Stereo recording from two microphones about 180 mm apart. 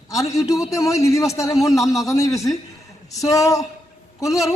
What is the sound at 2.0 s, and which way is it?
A woman's voice, 20° left (ahead or behind).